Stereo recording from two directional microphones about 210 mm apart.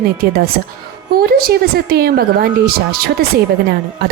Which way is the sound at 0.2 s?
45° right (ahead or behind).